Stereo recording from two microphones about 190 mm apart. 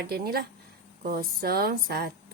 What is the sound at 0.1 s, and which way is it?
A woman's voice, 55° right (ahead or behind).